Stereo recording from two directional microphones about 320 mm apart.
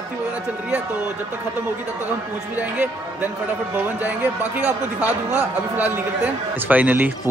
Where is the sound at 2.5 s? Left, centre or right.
Centre.